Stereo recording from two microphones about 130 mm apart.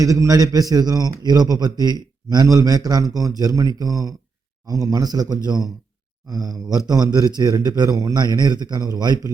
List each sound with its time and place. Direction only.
0.0 s a man's voice: 25° right (ahead or behind)